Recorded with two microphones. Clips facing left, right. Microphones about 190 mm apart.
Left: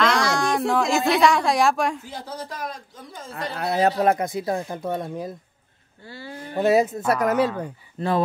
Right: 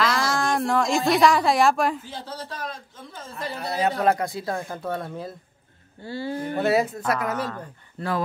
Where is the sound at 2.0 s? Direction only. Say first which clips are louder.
Left 1 dB; 10° left (ahead or behind).